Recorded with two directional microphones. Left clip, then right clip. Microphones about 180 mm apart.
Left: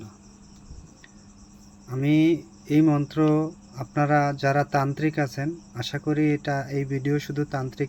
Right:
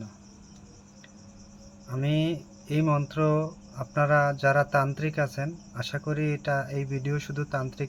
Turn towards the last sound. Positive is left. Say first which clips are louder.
# left 3 dB
turn(degrees=20)  # may be behind; listen again after turning